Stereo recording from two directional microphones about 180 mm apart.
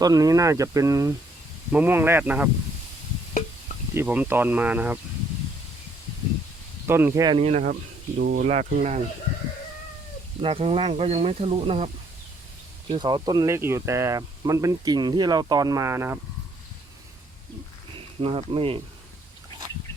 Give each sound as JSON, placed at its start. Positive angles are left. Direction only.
{"t": 0.0, "sound": "speech", "side_deg": -20}
{"t": 3.9, "sound": "speech", "side_deg": -10}
{"t": 6.8, "sound": "speech", "side_deg": -15}
{"t": 7.3, "sound": "speech", "side_deg": -35}
{"t": 8.2, "sound": "speech", "side_deg": -45}
{"t": 10.4, "sound": "speech", "side_deg": -30}
{"t": 12.9, "sound": "speech", "side_deg": -25}
{"t": 18.2, "sound": "speech", "side_deg": -30}